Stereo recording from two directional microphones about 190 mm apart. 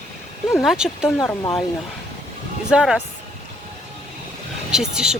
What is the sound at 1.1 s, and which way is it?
Speech, 15° left (ahead or behind).